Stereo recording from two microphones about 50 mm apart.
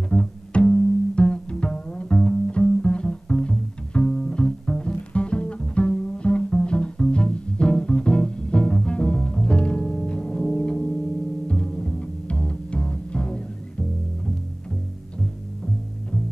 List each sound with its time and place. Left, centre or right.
0.1 s pizzicato: centre
2.1 s music: centre